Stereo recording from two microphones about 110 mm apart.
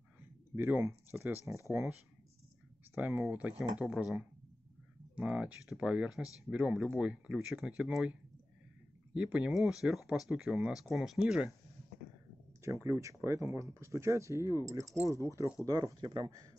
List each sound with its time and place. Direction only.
0.6 s speech: 15° right (ahead or behind)
3.0 s speech: 15° right (ahead or behind)
12.6 s speech: 25° right (ahead or behind)
16.0 s speech: 45° right (ahead or behind)